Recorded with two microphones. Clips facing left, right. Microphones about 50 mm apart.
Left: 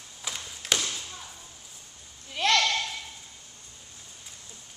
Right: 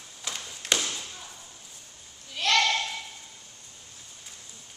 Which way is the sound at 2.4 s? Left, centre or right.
Left.